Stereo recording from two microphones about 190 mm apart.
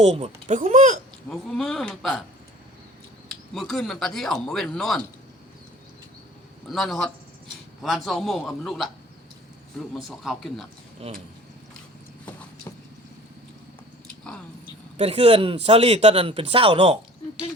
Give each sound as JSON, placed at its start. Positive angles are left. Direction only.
{"t": 0.0, "sound": "speech", "side_deg": -35}
{"t": 1.3, "sound": "speech", "side_deg": 0}
{"t": 3.2, "sound": "speech", "side_deg": 0}
{"t": 6.7, "sound": "speech", "side_deg": 0}
{"t": 9.9, "sound": "speech", "side_deg": 0}
{"t": 14.9, "sound": "speech", "side_deg": -30}